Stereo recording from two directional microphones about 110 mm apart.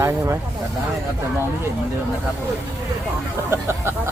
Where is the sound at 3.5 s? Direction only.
25° right (ahead or behind).